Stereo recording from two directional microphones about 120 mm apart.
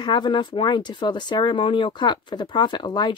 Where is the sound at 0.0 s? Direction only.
40° left (ahead or behind).